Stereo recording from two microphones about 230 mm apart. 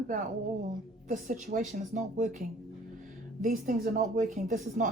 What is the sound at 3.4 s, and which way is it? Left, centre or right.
A woman's voice, right.